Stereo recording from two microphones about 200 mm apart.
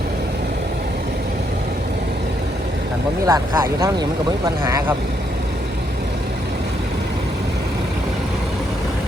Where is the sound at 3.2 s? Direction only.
15° right (ahead or behind).